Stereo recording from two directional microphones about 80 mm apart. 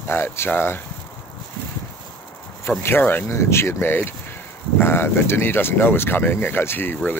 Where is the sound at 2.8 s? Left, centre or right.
Left.